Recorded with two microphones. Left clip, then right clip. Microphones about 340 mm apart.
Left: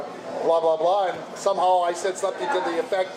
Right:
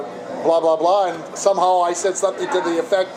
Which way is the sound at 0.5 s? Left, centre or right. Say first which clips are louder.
Right 4 dB; right.